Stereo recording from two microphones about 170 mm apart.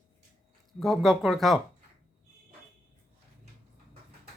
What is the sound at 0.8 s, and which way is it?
Speech, centre (ahead or behind).